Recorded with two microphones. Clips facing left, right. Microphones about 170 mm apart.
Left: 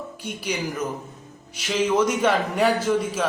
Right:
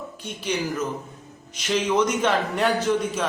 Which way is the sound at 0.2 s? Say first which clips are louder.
Right 1 dB; 10° left (ahead or behind).